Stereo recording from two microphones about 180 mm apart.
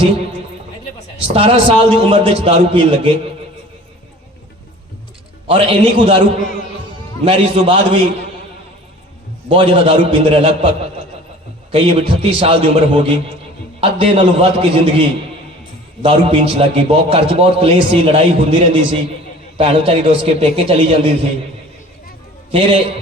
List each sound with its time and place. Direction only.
1.3 s a man's voice: 30° right (ahead or behind)
5.5 s a man's voice: 30° right (ahead or behind)
7.3 s a man's voice: 30° right (ahead or behind)
9.5 s a man's voice: 30° right (ahead or behind)
11.7 s a man's voice: 30° right (ahead or behind)
16.0 s a man's voice: 30° right (ahead or behind)
22.5 s a man's voice: 30° right (ahead or behind)